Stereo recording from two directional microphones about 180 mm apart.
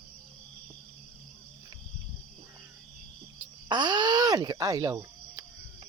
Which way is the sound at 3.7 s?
25° right (ahead or behind).